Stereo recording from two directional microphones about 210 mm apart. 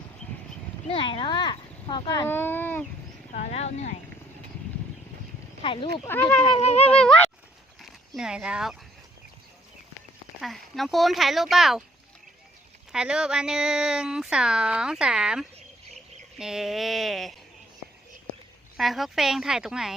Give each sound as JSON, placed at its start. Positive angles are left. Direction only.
{"t": 0.9, "sound": "speech", "side_deg": 25}
{"t": 3.3, "sound": "speech", "side_deg": 30}
{"t": 5.6, "sound": "speech", "side_deg": 25}
{"t": 6.1, "sound": "speech", "side_deg": 10}
{"t": 6.4, "sound": "speech", "side_deg": 30}
{"t": 6.9, "sound": "speech", "side_deg": 5}
{"t": 7.8, "sound": "a sound", "side_deg": 0}
{"t": 10.4, "sound": "speech", "side_deg": 0}
{"t": 12.9, "sound": "speech", "side_deg": -5}
{"t": 18.8, "sound": "speech", "side_deg": 0}